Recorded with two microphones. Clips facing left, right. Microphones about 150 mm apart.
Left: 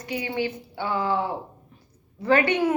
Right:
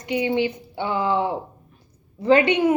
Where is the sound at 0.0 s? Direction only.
20° right (ahead or behind).